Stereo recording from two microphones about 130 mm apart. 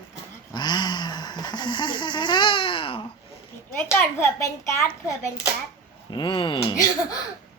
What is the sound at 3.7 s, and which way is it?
A child's voice, 15° left (ahead or behind).